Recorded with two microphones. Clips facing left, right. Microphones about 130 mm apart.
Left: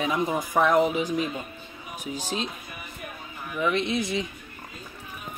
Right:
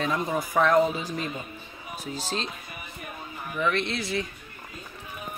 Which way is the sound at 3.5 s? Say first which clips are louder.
Left 2 dB; 15° left (ahead or behind).